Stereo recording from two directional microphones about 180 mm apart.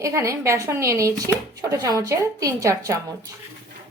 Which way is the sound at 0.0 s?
15° right (ahead or behind).